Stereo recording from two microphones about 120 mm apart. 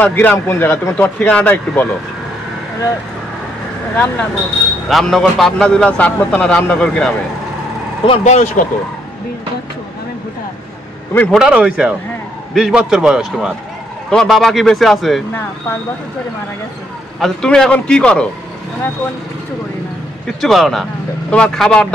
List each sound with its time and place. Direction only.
0.0 s a man's voice: 15° left (ahead or behind)
3.9 s a man's voice: 10° left (ahead or behind)
8.1 s speech: 70° left (ahead or behind)
11.3 s a man's voice: 5° right (ahead or behind)
17.2 s a man's voice: 5° left (ahead or behind)
20.3 s a man's voice: centre (ahead or behind)